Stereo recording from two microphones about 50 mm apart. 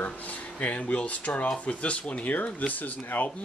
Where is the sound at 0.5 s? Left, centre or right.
Left.